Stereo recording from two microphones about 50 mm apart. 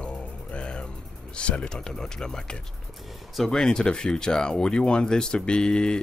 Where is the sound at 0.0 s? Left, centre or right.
Left.